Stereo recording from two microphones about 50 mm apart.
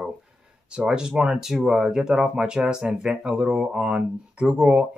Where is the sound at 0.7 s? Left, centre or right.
Centre.